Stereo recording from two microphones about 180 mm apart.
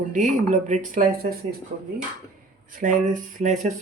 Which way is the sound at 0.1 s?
45° right (ahead or behind).